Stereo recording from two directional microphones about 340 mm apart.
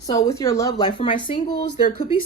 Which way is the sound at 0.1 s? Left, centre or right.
Centre.